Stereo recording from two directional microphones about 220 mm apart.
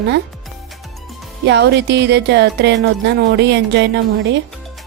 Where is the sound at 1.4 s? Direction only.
50° right (ahead or behind).